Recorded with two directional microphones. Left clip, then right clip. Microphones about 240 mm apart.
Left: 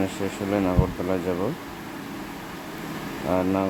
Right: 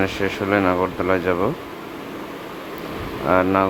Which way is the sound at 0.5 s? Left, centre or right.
Centre.